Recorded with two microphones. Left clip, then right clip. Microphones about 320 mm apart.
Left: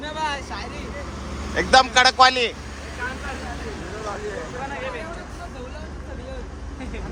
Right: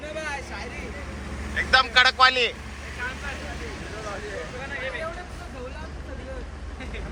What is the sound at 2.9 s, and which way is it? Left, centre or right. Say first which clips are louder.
Vehicle: left 2 dB; left.